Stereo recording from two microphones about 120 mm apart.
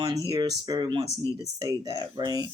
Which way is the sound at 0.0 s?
30° right (ahead or behind).